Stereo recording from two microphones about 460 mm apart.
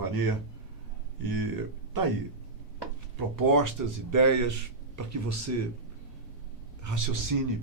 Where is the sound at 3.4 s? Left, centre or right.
Right.